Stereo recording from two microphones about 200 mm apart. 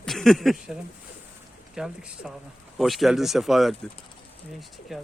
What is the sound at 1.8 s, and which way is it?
A man's voice, 5° right (ahead or behind).